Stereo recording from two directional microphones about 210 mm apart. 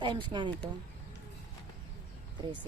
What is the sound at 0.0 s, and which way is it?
Speech, 20° right (ahead or behind).